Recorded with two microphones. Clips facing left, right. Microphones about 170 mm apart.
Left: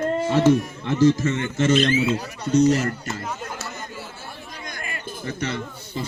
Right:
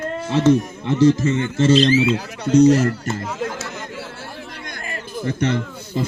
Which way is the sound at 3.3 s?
90° right.